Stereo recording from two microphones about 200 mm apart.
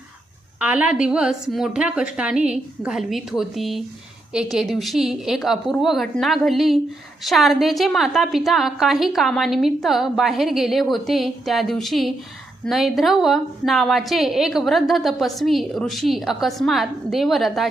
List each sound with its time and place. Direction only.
0.6 s a woman's voice: 5° right (ahead or behind)